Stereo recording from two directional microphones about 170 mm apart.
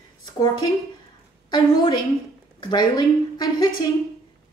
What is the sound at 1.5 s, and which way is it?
A woman's voice, 25° left (ahead or behind).